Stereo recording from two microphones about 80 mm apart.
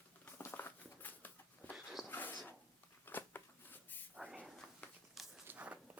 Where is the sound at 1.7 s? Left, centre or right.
Centre.